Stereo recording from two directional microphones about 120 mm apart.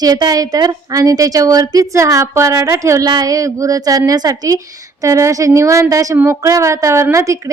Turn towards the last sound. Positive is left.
turn(degrees=-25)  # may be behind; listen again after turning